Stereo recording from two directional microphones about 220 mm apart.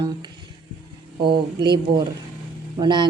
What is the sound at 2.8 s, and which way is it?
Speech, 20° right (ahead or behind).